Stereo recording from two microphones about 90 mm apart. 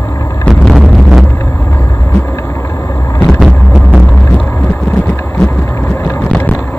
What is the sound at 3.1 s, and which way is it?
Vehicle, 25° left (ahead or behind).